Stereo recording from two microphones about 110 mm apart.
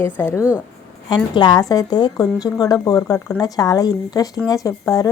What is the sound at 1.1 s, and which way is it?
Speech, 40° left (ahead or behind).